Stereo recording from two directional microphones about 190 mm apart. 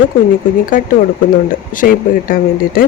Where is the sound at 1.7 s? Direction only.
45° left (ahead or behind).